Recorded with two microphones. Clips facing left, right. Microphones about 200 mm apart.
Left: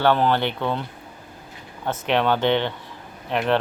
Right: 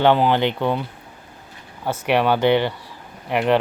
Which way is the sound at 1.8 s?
10° right (ahead or behind).